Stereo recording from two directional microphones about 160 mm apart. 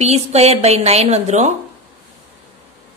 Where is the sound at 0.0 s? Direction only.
40° right (ahead or behind).